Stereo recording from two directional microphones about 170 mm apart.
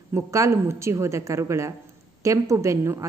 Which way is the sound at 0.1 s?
15° right (ahead or behind).